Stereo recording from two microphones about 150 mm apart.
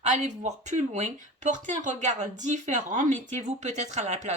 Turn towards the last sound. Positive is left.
turn(degrees=-50)  # may be behind; listen again after turning